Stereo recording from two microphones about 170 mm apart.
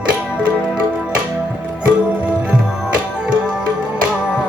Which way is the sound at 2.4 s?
5° right (ahead or behind).